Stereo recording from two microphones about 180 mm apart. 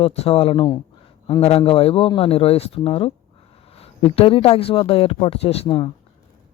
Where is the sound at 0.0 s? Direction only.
35° left (ahead or behind).